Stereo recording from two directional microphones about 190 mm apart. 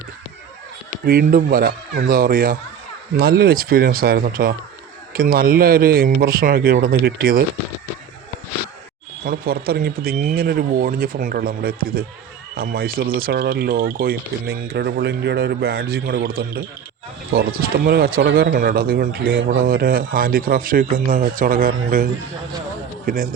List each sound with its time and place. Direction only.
0.9 s speech: 50° right (ahead or behind)
9.2 s speech: 50° right (ahead or behind)